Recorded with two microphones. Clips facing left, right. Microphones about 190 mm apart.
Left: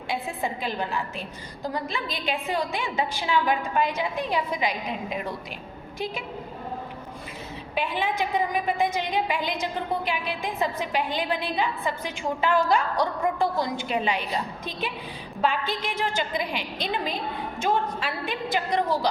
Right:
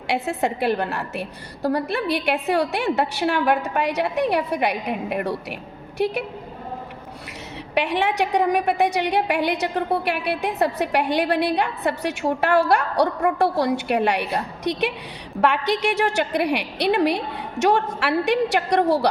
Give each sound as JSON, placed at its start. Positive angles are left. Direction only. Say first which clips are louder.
{"t": 0.1, "sound": "a woman's voice", "louder": "right 6 dB", "side_deg": -75}
{"t": 7.8, "sound": "a woman's voice", "louder": "right 6 dB", "side_deg": -75}